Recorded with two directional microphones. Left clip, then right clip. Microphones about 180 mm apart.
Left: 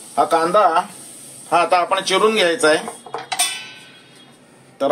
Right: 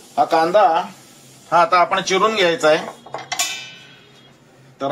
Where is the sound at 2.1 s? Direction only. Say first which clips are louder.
Left 1 dB; 25° left (ahead or behind).